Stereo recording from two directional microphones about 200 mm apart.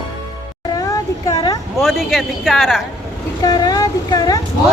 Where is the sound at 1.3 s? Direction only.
20° left (ahead or behind).